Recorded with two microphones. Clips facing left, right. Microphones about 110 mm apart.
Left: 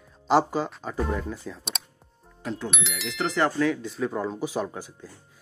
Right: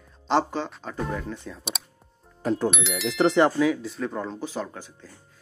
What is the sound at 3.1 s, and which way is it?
Speech, 25° right (ahead or behind).